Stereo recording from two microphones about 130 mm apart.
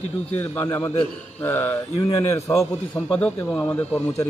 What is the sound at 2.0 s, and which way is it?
Speech, 25° left (ahead or behind).